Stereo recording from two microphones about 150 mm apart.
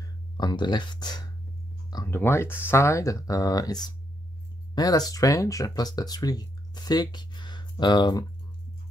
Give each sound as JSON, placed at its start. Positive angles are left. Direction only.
{"t": 0.0, "sound": "speech", "side_deg": 25}
{"t": 2.0, "sound": "speech", "side_deg": 15}